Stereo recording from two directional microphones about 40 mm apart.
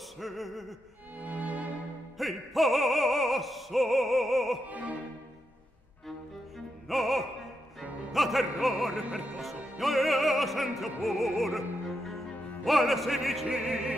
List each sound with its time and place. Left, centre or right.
0.2 s opera: centre
1.2 s music: right
2.1 s opera: centre
4.6 s music: right
6.9 s opera: centre
13.5 s music: centre